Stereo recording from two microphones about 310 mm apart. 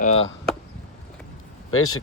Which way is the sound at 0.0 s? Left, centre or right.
Left.